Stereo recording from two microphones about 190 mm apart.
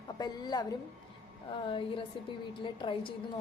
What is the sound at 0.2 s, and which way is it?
Speech, 20° left (ahead or behind).